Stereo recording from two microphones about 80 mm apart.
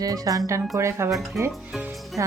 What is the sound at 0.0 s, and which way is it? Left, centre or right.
Speech, right.